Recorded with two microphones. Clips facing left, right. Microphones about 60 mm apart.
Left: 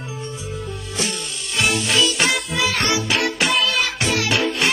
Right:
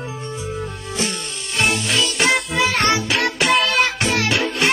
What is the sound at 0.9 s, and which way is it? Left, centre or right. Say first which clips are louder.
Music: right 1 dB; right.